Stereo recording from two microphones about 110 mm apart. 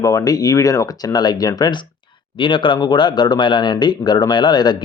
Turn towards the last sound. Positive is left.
turn(degrees=40)  # may be behind; listen again after turning